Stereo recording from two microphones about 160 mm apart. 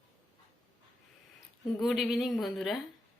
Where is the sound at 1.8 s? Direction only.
Centre (ahead or behind).